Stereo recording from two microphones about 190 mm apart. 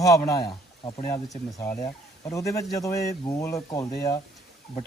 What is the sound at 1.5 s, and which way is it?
Speech, 15° left (ahead or behind).